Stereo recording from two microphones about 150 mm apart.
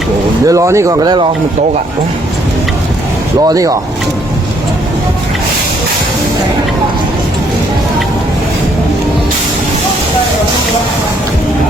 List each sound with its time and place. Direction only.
0.4 s speech: 20° right (ahead or behind)
3.4 s speech: 20° right (ahead or behind)